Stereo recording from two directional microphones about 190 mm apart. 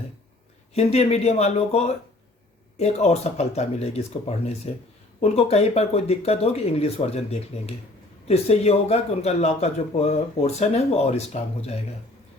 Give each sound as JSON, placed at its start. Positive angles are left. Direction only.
{"t": 0.7, "sound": "a man's voice", "side_deg": 35}